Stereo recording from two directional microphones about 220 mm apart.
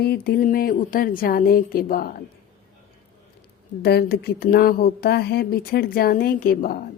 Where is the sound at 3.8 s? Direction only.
45° left (ahead or behind).